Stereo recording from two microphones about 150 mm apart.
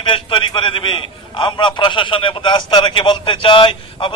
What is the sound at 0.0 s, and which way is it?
A man's voice, 35° left (ahead or behind).